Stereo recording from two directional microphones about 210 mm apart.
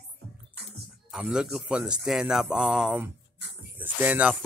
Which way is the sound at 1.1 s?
5° right (ahead or behind).